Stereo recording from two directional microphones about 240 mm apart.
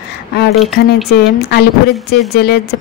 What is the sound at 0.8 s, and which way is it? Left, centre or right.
Speech, left.